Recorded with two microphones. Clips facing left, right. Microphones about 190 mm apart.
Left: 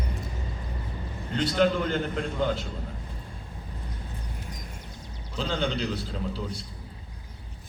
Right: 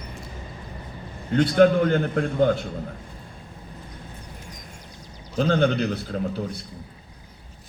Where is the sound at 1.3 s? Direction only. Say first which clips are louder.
Right 7 dB; 55° right (ahead or behind).